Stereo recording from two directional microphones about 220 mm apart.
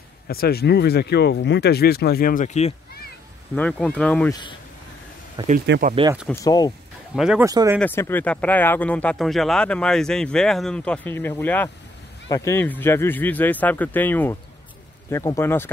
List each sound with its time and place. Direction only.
0.3 s speech: 45° left (ahead or behind)
3.5 s speech: 5° left (ahead or behind)
5.7 s speech: 40° right (ahead or behind)
6.4 s speech: 20° left (ahead or behind)
7.2 s speech: 5° right (ahead or behind)
7.4 s speech: 15° right (ahead or behind)
7.8 s speech: 10° left (ahead or behind)